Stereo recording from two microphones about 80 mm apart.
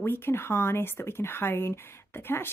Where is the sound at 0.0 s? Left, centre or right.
Left.